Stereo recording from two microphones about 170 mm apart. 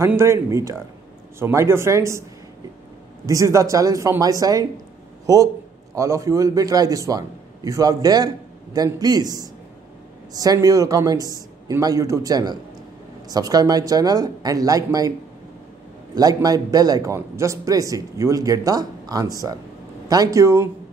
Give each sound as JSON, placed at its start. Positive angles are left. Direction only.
{"t": 0.0, "sound": "speech", "side_deg": -15}
{"t": 3.3, "sound": "a man's voice", "side_deg": -20}
{"t": 16.2, "sound": "a man's voice", "side_deg": -20}